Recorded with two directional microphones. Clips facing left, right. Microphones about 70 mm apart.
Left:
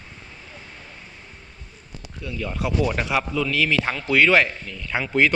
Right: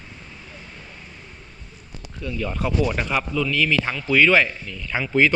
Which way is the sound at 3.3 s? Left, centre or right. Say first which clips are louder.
Right 1 dB; left.